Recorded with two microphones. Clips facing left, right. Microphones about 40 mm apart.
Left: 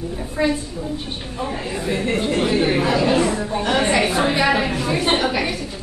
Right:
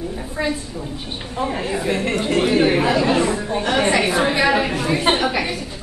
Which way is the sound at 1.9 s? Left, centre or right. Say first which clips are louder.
Left 1 dB; right.